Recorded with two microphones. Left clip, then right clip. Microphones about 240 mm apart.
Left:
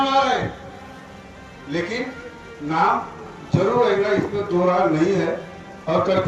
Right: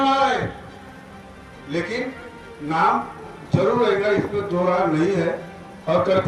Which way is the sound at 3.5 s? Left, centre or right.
Right.